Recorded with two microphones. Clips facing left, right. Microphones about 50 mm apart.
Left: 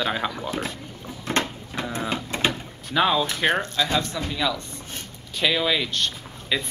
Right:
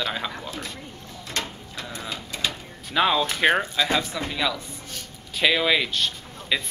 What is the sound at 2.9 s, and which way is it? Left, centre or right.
Speech, centre.